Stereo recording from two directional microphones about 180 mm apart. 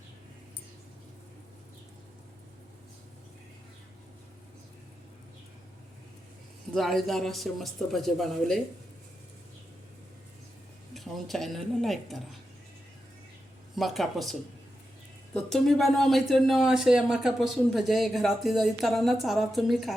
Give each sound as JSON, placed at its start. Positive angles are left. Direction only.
{"t": 6.7, "sound": "speech", "side_deg": 0}
{"t": 10.9, "sound": "speech", "side_deg": 0}
{"t": 13.7, "sound": "speech", "side_deg": 0}